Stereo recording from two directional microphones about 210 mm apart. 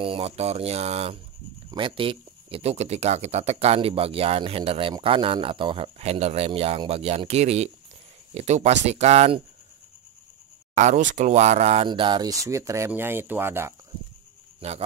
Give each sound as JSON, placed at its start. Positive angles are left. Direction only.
{"t": 0.0, "sound": "speech", "side_deg": -25}
{"t": 10.7, "sound": "speech", "side_deg": -35}
{"t": 14.6, "sound": "speech", "side_deg": -30}